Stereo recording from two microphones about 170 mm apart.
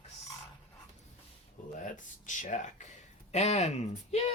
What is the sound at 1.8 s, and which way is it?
Speech, 50° left (ahead or behind).